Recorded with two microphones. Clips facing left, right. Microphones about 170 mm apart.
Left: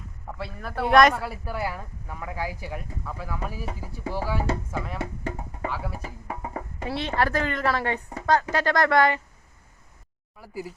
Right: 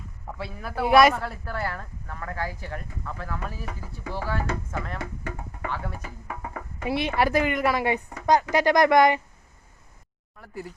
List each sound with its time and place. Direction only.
0.3 s speech: centre (ahead or behind)
1.1 s speech: 10° left (ahead or behind)
6.2 s music: 25° left (ahead or behind)
6.8 s speech: 15° right (ahead or behind)
10.3 s speech: 5° left (ahead or behind)